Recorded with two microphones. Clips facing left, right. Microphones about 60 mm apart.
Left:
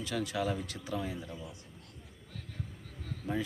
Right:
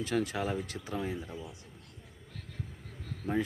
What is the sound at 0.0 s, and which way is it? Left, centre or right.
Speech, right.